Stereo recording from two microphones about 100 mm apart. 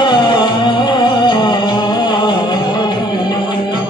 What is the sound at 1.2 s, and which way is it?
Music, 45° left (ahead or behind).